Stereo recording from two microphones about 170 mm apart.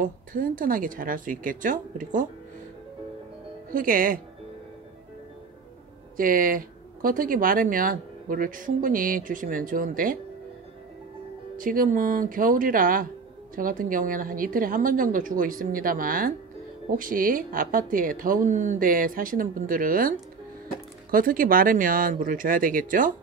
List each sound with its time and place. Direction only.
0.0 s a woman's voice: 55° right (ahead or behind)
3.7 s speech: 55° right (ahead or behind)
6.1 s speech: 55° right (ahead or behind)
11.5 s a woman's voice: 55° right (ahead or behind)